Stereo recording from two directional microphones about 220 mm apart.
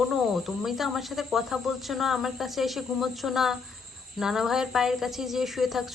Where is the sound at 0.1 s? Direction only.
Centre (ahead or behind).